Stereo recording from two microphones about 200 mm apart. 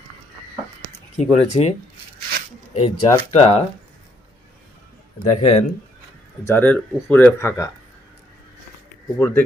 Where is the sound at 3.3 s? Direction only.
30° left (ahead or behind).